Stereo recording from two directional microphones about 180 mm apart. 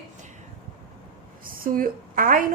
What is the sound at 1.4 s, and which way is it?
A woman's voice, 50° right (ahead or behind).